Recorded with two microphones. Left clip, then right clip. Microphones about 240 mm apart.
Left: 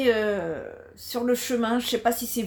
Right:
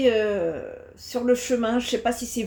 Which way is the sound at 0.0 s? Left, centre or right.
Left.